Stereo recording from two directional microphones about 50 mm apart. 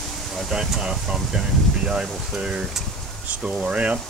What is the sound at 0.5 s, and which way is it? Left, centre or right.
Speech, centre.